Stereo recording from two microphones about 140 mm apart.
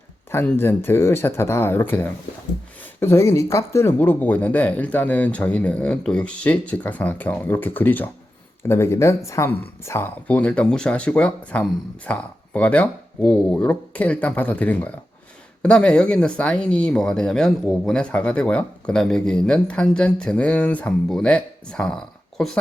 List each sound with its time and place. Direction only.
0.3 s speech: 15° left (ahead or behind)